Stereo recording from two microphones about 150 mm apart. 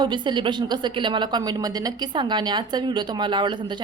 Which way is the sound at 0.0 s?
30° right (ahead or behind).